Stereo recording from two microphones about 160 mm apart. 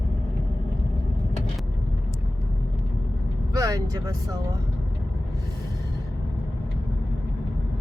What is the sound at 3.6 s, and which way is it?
Speech, 20° right (ahead or behind).